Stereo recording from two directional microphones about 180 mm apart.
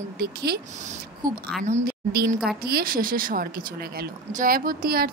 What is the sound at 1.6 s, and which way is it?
Speech, 50° right (ahead or behind).